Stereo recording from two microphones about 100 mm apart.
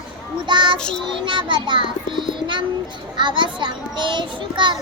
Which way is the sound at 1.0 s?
55° right (ahead or behind).